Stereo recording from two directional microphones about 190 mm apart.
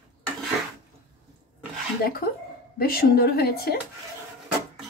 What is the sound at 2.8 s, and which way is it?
A woman's voice, 55° left (ahead or behind).